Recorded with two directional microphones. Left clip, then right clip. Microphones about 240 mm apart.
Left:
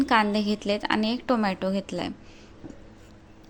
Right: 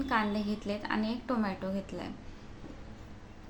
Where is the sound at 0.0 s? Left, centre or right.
Left.